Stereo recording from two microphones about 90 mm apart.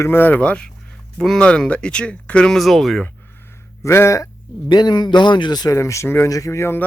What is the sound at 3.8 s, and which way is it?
Speech, 30° left (ahead or behind).